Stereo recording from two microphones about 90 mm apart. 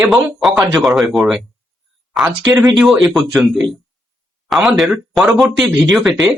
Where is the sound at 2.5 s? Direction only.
45° right (ahead or behind).